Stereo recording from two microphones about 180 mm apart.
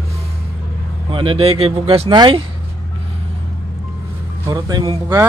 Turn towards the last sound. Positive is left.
turn(degrees=-20)  # may be behind; listen again after turning